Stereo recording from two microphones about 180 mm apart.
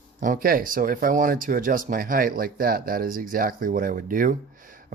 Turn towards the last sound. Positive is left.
turn(degrees=-50)  # may be behind; listen again after turning